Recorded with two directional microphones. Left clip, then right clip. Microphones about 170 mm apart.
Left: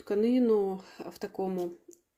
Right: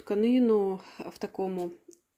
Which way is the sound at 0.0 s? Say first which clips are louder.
Right 1 dB; 10° right (ahead or behind).